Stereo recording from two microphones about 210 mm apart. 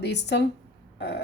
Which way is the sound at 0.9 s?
50° left (ahead or behind).